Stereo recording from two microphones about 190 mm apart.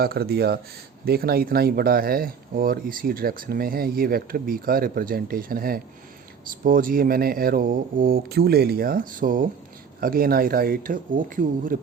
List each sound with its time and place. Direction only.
0.0 s speech: 55° right (ahead or behind)